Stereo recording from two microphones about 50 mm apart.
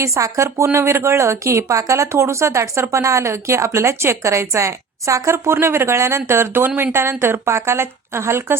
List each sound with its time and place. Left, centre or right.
0.0 s a woman's voice: right
2.9 s a woman's voice: right